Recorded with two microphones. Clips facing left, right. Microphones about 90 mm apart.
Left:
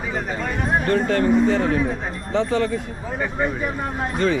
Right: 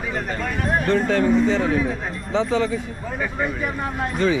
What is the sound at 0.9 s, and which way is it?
Speech, 45° left (ahead or behind).